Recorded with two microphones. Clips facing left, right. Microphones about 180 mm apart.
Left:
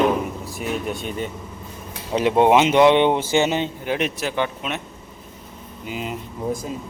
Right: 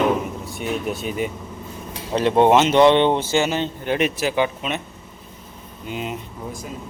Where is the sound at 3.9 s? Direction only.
Centre (ahead or behind).